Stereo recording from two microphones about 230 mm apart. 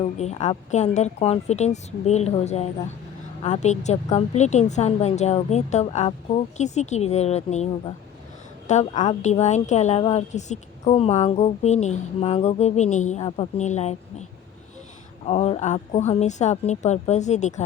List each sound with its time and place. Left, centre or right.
0.0 s a woman's voice: left
15.3 s a woman's voice: left